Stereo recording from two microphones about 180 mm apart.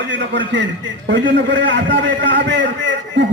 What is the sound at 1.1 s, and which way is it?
A man's voice, 80° right.